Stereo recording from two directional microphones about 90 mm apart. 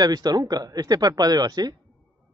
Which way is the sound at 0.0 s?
45° right (ahead or behind).